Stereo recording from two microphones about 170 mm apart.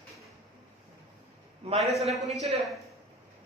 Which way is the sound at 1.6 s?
35° right (ahead or behind).